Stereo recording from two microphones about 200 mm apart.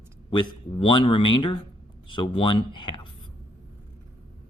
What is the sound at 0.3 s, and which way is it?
Speech, 25° left (ahead or behind).